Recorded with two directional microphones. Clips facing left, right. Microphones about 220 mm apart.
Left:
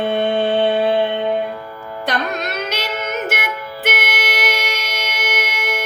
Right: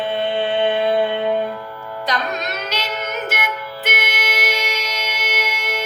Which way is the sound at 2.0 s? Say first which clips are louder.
Left 2 dB; 55° left (ahead or behind).